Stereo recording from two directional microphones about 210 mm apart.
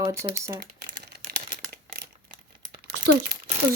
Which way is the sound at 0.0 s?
15° right (ahead or behind).